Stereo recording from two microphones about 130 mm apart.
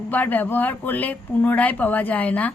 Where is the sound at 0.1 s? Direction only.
15° left (ahead or behind).